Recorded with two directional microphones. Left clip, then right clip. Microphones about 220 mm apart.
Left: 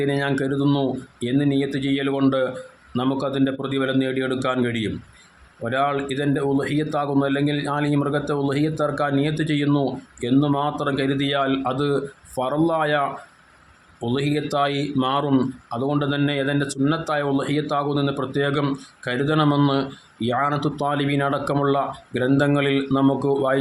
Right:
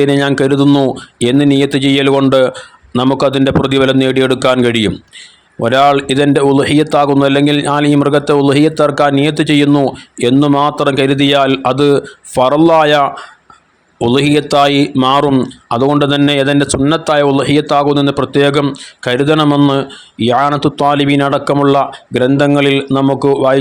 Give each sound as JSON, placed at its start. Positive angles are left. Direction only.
{"t": 0.0, "sound": "a man's voice", "side_deg": -40}